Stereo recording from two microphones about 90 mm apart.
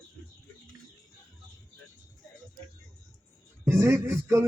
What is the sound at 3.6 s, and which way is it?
Speech, 25° right (ahead or behind).